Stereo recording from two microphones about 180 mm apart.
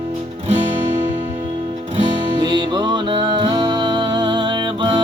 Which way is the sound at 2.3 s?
25° right (ahead or behind).